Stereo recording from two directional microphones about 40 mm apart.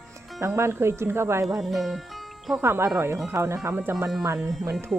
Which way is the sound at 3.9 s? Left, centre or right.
Centre.